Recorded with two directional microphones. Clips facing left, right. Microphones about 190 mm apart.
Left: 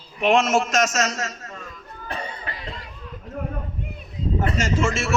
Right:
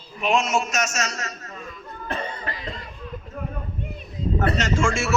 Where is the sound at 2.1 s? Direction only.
50° right (ahead or behind).